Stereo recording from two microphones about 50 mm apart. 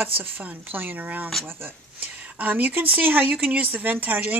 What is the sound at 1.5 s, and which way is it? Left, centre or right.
Speech, right.